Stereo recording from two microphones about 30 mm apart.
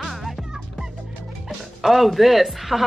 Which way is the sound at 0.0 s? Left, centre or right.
Centre.